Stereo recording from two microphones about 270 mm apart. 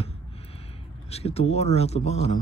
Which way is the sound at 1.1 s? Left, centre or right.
Left.